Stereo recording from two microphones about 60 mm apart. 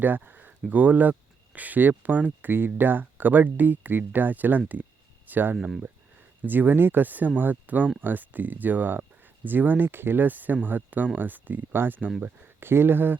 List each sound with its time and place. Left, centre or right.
0.0 s speech: right
4.7 s a sound: right
5.5 s speech: centre
6.4 s speech: right